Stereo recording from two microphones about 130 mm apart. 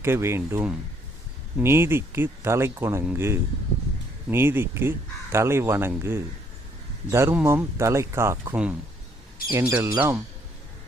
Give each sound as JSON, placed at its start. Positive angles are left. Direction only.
{"t": 0.0, "sound": "speech", "side_deg": -20}